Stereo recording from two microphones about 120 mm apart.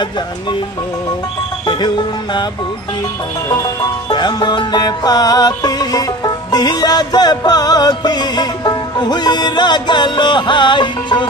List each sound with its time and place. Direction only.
1.7 s music: 40° left (ahead or behind)
4.1 s music: 35° left (ahead or behind)